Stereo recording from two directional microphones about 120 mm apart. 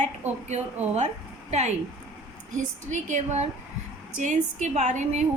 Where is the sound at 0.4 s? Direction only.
70° right (ahead or behind).